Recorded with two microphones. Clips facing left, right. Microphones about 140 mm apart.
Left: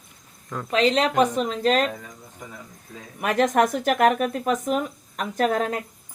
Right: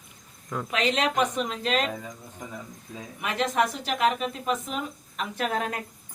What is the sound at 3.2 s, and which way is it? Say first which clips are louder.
Speech: left 6 dB; 50° left (ahead or behind).